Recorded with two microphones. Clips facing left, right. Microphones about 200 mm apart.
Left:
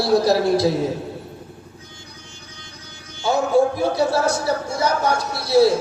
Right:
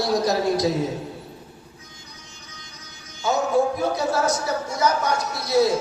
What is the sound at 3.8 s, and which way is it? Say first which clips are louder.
A man's voice: left 3 dB; 30° left (ahead or behind).